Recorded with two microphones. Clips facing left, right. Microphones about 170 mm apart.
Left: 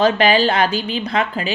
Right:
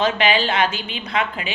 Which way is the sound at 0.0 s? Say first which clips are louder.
Left 5 dB; 40° left (ahead or behind).